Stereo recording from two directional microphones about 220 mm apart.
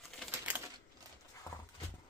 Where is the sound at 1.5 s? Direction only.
15° left (ahead or behind).